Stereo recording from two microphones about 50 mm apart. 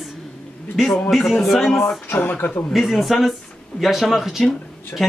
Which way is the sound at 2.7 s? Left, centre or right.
Centre.